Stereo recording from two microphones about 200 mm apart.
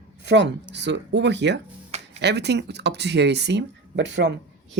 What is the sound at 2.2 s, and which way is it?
Speech, 55° right (ahead or behind).